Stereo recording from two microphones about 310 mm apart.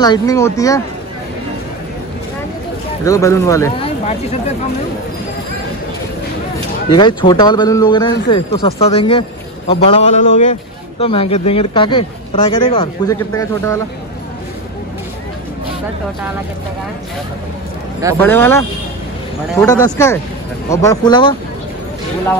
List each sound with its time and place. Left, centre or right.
0.0 s a man's voice: centre
3.1 s a man's voice: centre
7.0 s a man's voice: centre
18.2 s a man's voice: centre